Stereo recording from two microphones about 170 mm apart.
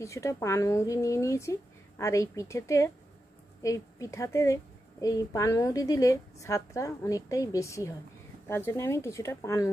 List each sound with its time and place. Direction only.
0.0 s a woman's voice: 15° left (ahead or behind)